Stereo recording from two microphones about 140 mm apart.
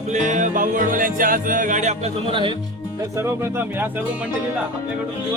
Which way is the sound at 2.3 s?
40° right (ahead or behind).